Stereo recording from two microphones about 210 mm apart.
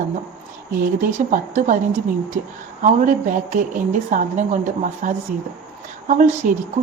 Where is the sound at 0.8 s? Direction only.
40° right (ahead or behind).